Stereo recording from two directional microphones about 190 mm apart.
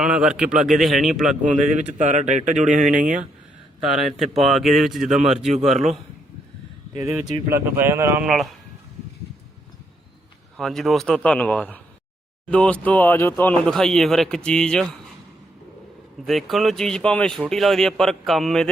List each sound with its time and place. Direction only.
0.0 s speech: 5° right (ahead or behind)
1.5 s speech: 40° right (ahead or behind)
3.9 s speech: centre (ahead or behind)
7.0 s speech: 5° right (ahead or behind)
8.3 s speech: centre (ahead or behind)
10.6 s speech: centre (ahead or behind)
16.2 s speech: centre (ahead or behind)